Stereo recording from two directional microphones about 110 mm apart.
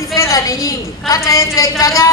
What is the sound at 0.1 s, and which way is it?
A woman's voice, 30° left (ahead or behind).